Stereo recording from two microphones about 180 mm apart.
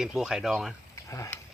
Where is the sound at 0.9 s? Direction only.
15° left (ahead or behind).